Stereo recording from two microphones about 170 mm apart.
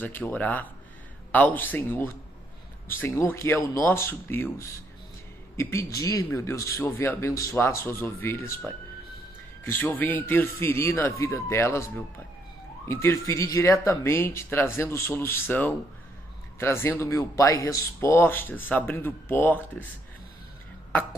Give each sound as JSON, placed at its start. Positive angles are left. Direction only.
{"t": 0.0, "sound": "a man's voice", "side_deg": 10}
{"t": 9.7, "sound": "a man's voice", "side_deg": 10}